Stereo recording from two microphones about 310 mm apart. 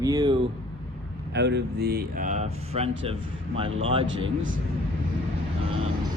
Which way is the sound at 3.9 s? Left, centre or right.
Centre.